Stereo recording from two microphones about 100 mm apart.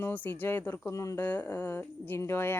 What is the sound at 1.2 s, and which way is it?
Speech, 15° left (ahead or behind).